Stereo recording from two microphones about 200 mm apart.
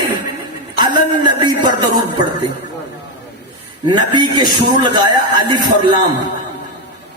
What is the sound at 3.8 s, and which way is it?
A man's voice, 25° right (ahead or behind).